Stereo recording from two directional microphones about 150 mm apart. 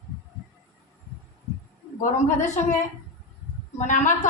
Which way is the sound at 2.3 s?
55° left (ahead or behind).